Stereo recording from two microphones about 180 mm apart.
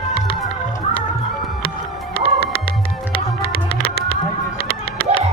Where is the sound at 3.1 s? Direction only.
30° left (ahead or behind).